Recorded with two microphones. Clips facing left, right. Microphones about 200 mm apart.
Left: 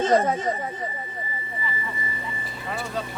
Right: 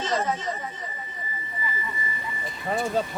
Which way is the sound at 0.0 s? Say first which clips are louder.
Left 6 dB; 55° left (ahead or behind).